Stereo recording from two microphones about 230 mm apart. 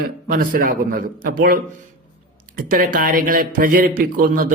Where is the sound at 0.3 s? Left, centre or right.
Right.